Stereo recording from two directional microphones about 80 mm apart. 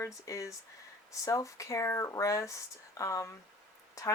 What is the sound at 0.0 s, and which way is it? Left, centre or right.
Speech, left.